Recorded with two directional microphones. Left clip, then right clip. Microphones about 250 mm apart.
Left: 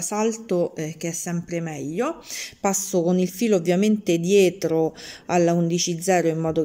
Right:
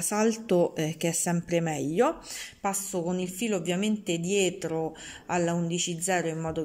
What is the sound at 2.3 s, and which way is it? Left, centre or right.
A woman's voice, centre.